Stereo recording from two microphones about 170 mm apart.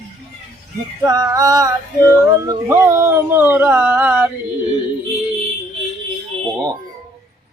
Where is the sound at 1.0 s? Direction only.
20° right (ahead or behind).